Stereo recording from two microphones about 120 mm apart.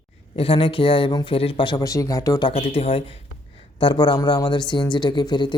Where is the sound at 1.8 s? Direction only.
30° left (ahead or behind).